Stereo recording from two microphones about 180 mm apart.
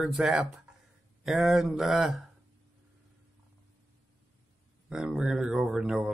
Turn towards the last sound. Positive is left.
turn(degrees=-5)  # may be behind; listen again after turning